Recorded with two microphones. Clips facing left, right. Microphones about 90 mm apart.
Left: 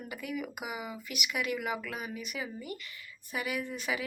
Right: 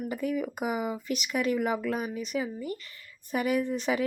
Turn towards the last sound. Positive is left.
turn(degrees=-40)  # may be behind; listen again after turning